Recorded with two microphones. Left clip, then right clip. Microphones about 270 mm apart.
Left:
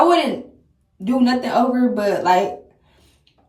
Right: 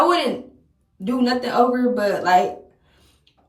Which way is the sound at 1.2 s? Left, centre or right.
Centre.